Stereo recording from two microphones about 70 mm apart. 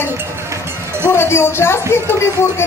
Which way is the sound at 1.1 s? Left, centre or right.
Left.